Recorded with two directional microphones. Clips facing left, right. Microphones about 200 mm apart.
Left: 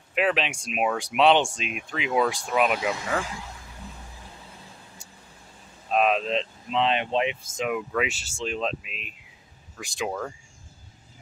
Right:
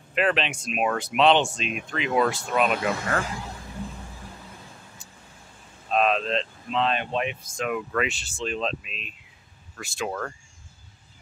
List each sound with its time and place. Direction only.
0.1 s speech: 10° left (ahead or behind)
5.0 s vehicle: 10° left (ahead or behind)
5.9 s speech: 10° left (ahead or behind)
7.7 s speech: 5° left (ahead or behind)